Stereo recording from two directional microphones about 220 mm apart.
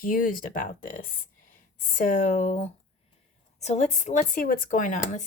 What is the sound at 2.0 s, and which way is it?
Speech, 35° left (ahead or behind).